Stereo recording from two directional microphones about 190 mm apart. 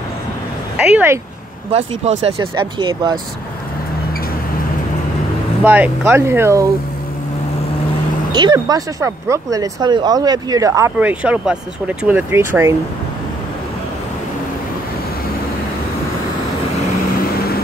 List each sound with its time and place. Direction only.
0.7 s speech: 10° right (ahead or behind)
2.0 s speech: 30° right (ahead or behind)
5.6 s speech: 10° right (ahead or behind)
8.3 s speech: 25° right (ahead or behind)